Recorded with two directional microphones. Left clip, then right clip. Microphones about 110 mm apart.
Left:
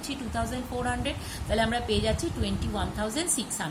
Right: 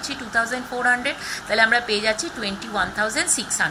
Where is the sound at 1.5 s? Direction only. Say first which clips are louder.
Right 9 dB; 20° left (ahead or behind).